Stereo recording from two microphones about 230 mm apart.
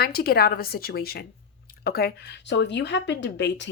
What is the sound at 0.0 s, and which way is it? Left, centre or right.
A woman's voice, left.